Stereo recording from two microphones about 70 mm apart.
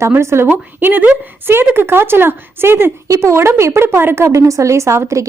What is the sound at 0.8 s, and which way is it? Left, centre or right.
A woman's voice, right.